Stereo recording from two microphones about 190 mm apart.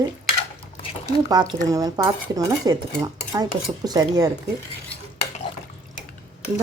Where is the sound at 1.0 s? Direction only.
20° right (ahead or behind).